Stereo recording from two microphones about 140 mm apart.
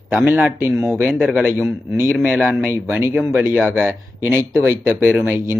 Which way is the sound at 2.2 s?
5° right (ahead or behind).